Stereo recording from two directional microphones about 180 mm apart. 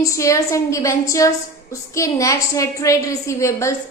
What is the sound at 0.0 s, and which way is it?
A woman's voice, 15° left (ahead or behind).